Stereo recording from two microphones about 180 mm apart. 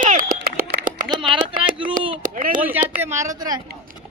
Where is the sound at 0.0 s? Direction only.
45° right (ahead or behind).